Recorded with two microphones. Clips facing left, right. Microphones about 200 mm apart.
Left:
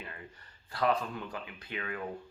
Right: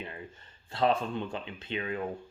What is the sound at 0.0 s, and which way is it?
Speech, 25° right (ahead or behind).